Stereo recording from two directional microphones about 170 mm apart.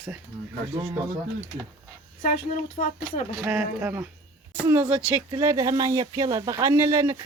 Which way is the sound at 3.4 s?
15° right (ahead or behind).